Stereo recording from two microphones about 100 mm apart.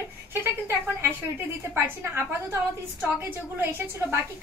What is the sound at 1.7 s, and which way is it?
Speech, 25° right (ahead or behind).